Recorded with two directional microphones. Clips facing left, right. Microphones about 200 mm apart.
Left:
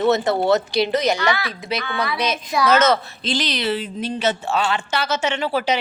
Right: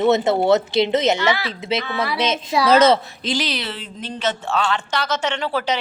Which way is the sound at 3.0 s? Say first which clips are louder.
Even; 10° right (ahead or behind).